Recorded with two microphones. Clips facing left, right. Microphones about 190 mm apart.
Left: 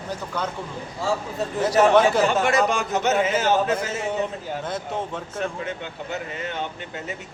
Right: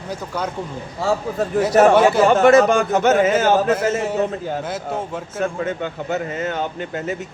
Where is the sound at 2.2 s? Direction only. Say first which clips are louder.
Right 8 dB; 50° right (ahead or behind).